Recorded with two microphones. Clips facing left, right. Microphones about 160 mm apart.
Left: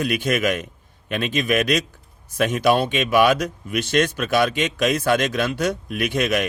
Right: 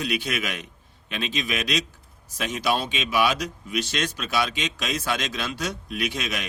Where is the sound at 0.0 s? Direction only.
50° left (ahead or behind).